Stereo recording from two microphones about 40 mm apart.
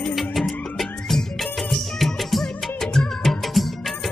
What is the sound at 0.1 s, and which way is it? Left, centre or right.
Music, centre.